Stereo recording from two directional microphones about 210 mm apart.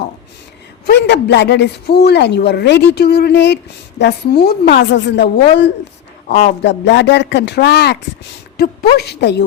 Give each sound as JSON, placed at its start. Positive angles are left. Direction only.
{"t": 0.9, "sound": "a man's voice", "side_deg": 55}